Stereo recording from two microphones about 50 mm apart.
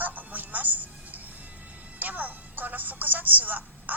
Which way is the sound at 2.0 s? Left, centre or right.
Right.